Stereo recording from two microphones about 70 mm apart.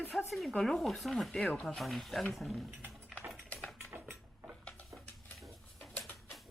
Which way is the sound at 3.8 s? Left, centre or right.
Right.